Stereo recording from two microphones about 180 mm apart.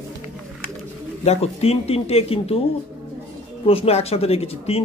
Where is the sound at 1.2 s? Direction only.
35° left (ahead or behind).